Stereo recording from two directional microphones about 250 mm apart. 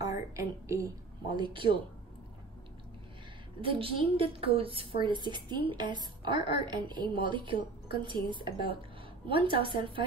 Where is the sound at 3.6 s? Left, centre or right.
Right.